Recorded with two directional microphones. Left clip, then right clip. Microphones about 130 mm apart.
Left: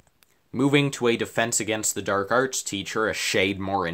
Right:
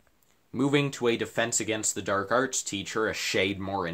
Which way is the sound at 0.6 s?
35° left (ahead or behind).